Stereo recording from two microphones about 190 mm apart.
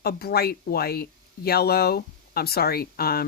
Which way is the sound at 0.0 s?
55° left (ahead or behind).